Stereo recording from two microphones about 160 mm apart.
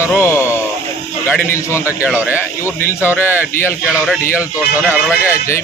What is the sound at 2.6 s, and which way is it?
Speech, 15° left (ahead or behind).